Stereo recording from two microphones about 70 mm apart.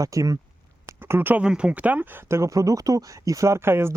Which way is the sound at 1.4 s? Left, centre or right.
Centre.